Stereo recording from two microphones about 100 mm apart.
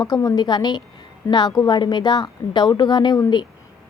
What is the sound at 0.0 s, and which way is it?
A woman's voice, 35° left (ahead or behind).